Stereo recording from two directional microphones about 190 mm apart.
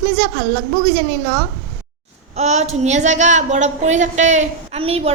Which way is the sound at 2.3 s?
35° right (ahead or behind).